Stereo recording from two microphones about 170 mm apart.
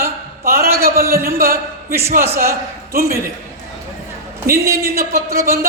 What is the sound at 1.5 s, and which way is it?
Speech, 15° right (ahead or behind).